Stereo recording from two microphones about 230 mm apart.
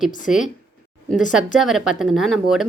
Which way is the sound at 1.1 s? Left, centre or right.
Centre.